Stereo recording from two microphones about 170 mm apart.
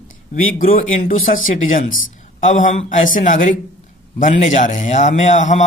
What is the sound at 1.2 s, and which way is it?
A man's voice, 55° left (ahead or behind).